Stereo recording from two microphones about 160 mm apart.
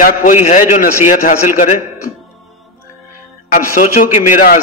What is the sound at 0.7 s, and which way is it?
A man's voice, 50° left (ahead or behind).